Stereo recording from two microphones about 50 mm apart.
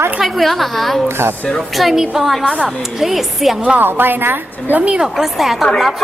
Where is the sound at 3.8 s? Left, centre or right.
Right.